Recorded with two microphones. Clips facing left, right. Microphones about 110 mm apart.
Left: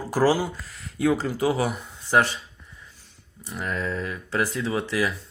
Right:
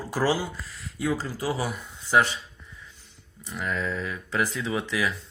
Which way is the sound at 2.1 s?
45° left (ahead or behind).